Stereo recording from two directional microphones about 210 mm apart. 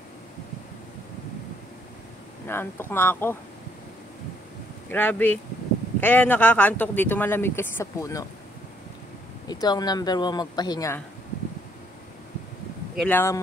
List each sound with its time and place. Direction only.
2.4 s speech: 10° left (ahead or behind)
4.8 s speech: 10° left (ahead or behind)
9.5 s speech: 20° left (ahead or behind)
12.9 s speech: 5° left (ahead or behind)